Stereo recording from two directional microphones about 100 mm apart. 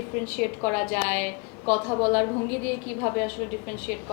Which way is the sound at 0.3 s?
15° left (ahead or behind).